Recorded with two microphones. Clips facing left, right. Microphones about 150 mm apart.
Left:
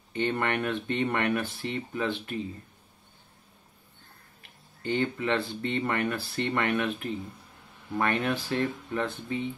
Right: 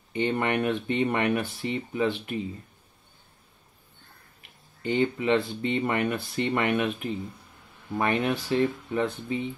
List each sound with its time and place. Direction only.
0.1 s speech: 15° right (ahead or behind)
4.8 s speech: 15° right (ahead or behind)